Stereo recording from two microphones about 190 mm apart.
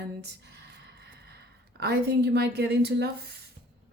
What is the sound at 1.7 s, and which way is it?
Speech, 60° right (ahead or behind).